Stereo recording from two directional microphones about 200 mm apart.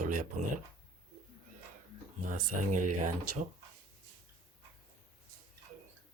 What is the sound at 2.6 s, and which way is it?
Speech, 40° right (ahead or behind).